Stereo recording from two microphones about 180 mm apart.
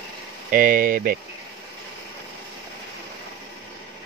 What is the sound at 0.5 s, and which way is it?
Speech, 50° right (ahead or behind).